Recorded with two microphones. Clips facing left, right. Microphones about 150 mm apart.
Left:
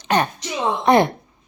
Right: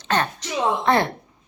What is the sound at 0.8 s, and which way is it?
Speech, 15° left (ahead or behind).